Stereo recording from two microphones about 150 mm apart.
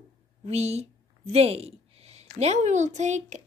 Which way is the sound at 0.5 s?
45° right (ahead or behind).